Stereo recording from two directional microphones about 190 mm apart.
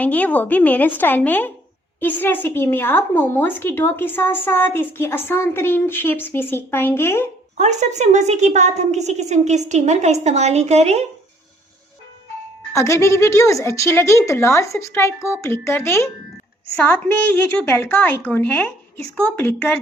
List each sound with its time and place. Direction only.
0.0 s a woman's voice: 10° left (ahead or behind)
7.5 s a woman's voice: 40° right (ahead or behind)
12.7 s a woman's voice: 15° left (ahead or behind)